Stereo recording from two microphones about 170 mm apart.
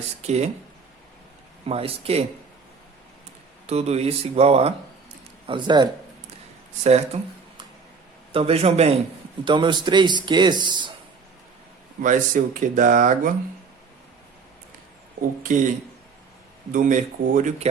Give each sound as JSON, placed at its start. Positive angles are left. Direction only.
{"t": 0.2, "sound": "speech", "side_deg": -40}
{"t": 1.6, "sound": "speech", "side_deg": -35}
{"t": 3.7, "sound": "a man's voice", "side_deg": -40}
{"t": 6.8, "sound": "speech", "side_deg": -40}
{"t": 8.3, "sound": "a man's voice", "side_deg": -35}
{"t": 12.0, "sound": "speech", "side_deg": -50}
{"t": 15.4, "sound": "speech", "side_deg": -50}
{"t": 16.7, "sound": "speech", "side_deg": -50}